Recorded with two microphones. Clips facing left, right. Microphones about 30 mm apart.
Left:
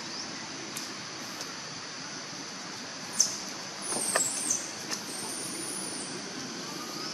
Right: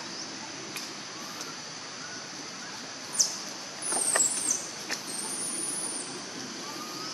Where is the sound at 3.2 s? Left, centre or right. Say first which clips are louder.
Right 1 dB; right.